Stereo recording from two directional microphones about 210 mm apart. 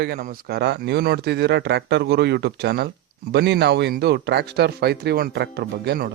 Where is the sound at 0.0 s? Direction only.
45° right (ahead or behind).